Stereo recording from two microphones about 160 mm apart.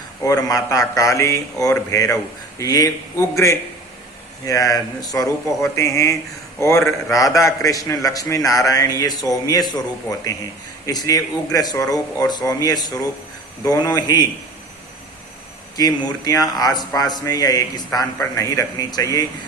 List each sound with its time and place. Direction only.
0.2 s speech: 20° left (ahead or behind)
15.8 s speech: 25° left (ahead or behind)